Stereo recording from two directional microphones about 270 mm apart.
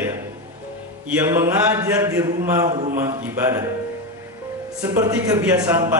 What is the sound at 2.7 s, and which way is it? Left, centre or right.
Speech, right.